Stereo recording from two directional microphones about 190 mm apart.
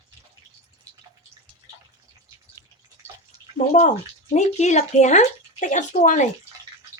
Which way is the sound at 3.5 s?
40° left (ahead or behind).